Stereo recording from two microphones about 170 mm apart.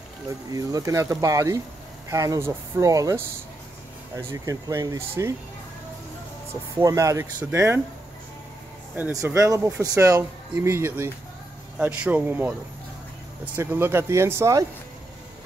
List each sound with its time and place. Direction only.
0.5 s speech: 20° right (ahead or behind)
6.8 s speech: 20° right (ahead or behind)
8.9 s speech: 15° right (ahead or behind)
13.6 s speech: 15° right (ahead or behind)